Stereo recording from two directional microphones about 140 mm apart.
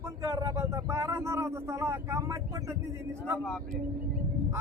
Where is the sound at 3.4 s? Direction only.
5° left (ahead or behind).